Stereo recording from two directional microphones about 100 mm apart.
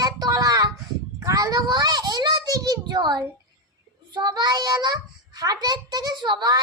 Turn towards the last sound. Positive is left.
turn(degrees=-40)  # may be behind; listen again after turning